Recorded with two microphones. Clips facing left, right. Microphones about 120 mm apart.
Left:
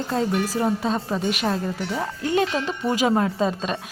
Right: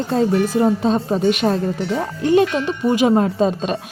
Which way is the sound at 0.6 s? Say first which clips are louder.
Right 6 dB; 25° right (ahead or behind).